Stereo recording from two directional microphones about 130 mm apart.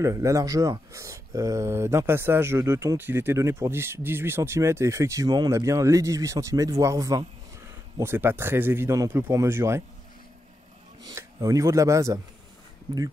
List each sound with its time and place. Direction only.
0.0 s speech: 25° right (ahead or behind)
11.1 s speech: 25° right (ahead or behind)